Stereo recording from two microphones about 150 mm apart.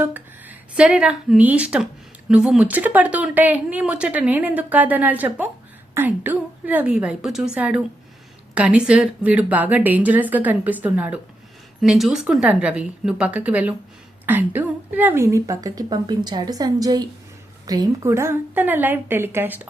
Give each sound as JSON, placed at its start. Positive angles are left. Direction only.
{"t": 0.0, "sound": "a woman's voice", "side_deg": -10}